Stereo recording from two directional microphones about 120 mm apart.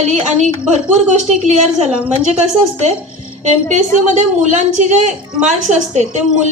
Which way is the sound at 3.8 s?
80° right.